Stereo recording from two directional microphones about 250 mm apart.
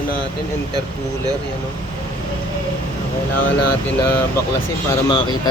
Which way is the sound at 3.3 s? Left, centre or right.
Left.